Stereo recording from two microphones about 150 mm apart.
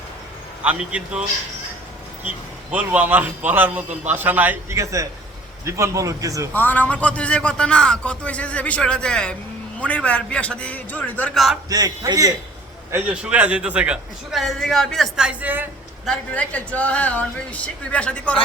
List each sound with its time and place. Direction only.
0.6 s a man's voice: 5° right (ahead or behind)
2.7 s a man's voice: 10° right (ahead or behind)
6.5 s a man's voice: 10° left (ahead or behind)
11.7 s a man's voice: 25° right (ahead or behind)
12.9 s a man's voice: 10° right (ahead or behind)
16.0 s a man's voice: 10° left (ahead or behind)